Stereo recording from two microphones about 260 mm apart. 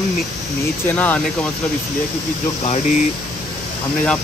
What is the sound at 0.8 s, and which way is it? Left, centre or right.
Speech, centre.